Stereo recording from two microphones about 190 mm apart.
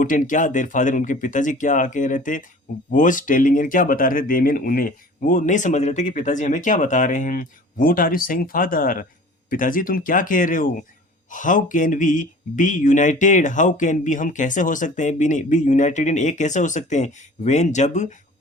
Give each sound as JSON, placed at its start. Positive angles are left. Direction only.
{"t": 0.0, "sound": "speech", "side_deg": 45}